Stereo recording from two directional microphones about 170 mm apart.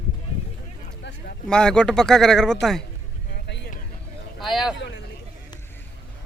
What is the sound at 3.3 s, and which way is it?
Vehicle, 85° left.